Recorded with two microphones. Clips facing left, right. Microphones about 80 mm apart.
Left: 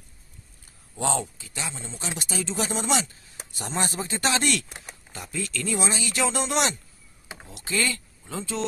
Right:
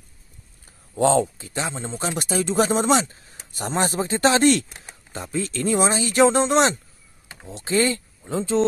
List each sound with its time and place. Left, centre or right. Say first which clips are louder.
0.9 s speech: right 9 dB; right